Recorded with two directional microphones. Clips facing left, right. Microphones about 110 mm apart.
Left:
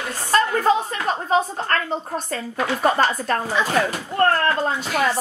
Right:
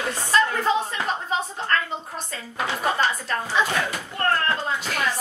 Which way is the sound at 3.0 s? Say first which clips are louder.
Left 4 dB; 45° left (ahead or behind).